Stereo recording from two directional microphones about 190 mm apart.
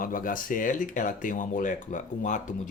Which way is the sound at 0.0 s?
45° left (ahead or behind).